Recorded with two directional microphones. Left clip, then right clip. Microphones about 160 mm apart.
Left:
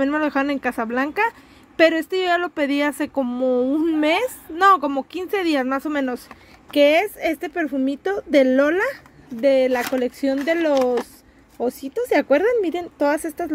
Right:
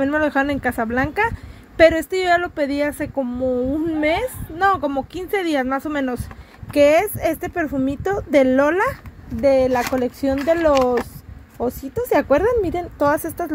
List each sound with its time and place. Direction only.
0.0 s a woman's voice: 10° left (ahead or behind); by 4.8 s 25° left (ahead or behind)
4.8 s a woman's voice: 15° left (ahead or behind)